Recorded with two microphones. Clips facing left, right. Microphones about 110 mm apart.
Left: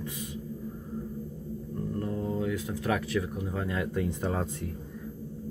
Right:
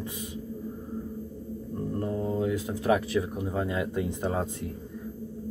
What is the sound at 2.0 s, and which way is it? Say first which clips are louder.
Speech: right 3 dB; 20° right (ahead or behind).